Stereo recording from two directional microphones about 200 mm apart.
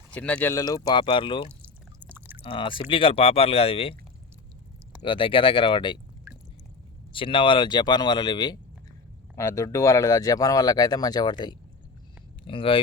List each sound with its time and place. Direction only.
0.1 s speech: 5° left (ahead or behind); by 1.5 s 25° left (ahead or behind)
1.5 s pour: 10° right (ahead or behind)
2.4 s speech: 25° left (ahead or behind)
5.0 s speech: 25° left (ahead or behind)
7.1 s speech: 25° left (ahead or behind)